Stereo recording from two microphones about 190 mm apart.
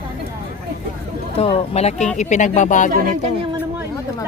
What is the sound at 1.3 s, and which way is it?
A woman's voice, 30° left (ahead or behind).